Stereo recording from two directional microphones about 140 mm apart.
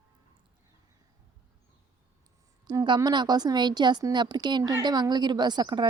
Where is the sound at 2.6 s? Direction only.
30° right (ahead or behind).